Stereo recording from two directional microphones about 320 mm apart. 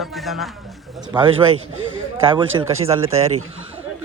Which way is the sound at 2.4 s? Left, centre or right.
Right.